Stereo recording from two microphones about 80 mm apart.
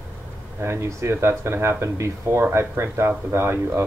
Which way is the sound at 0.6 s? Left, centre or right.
Right.